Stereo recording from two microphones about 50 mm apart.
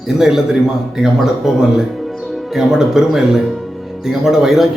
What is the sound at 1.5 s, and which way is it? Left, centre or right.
A man's voice, centre.